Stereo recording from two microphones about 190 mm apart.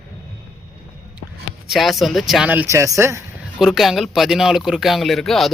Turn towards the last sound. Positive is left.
turn(degrees=0)  # may be behind; listen again after turning